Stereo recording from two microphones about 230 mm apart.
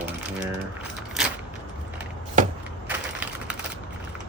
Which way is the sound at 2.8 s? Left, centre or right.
Centre.